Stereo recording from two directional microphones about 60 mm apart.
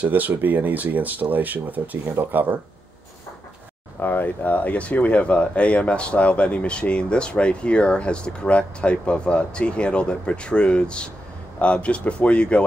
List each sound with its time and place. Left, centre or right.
0.0 s speech: right
4.0 s speech: left